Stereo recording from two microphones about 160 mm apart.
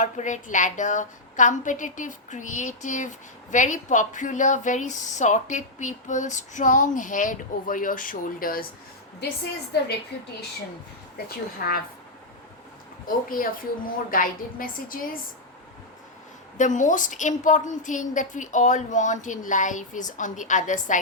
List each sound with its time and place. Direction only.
0.0 s speech: 50° left (ahead or behind)
11.6 s speech: 70° left (ahead or behind)
13.1 s a woman's voice: 60° left (ahead or behind)
16.6 s speech: 50° left (ahead or behind)